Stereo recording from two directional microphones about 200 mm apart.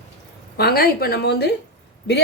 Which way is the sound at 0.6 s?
50° left (ahead or behind).